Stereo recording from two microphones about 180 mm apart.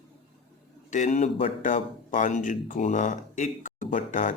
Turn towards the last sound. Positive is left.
turn(degrees=45)  # may be behind; listen again after turning